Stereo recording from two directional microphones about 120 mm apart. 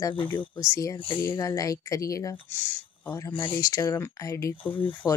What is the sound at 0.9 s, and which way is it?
Speech, 40° left (ahead or behind).